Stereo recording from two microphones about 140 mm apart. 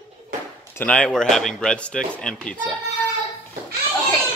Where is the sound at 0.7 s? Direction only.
10° left (ahead or behind).